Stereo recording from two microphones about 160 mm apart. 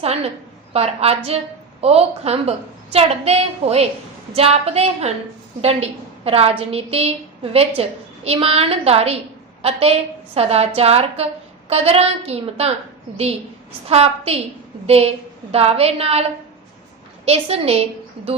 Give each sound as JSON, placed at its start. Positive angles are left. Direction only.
{"t": 0.0, "sound": "a woman's voice", "side_deg": -40}
{"t": 13.8, "sound": "a woman's voice", "side_deg": -40}
{"t": 17.2, "sound": "a woman's voice", "side_deg": -40}